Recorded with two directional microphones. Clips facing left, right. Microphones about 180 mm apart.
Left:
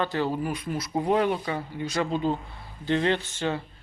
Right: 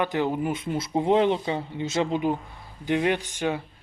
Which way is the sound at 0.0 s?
15° right (ahead or behind).